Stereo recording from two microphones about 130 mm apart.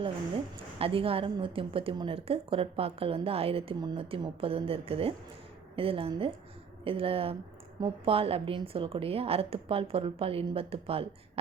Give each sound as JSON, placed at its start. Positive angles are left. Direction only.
{"t": 0.8, "sound": "a woman's voice", "side_deg": -45}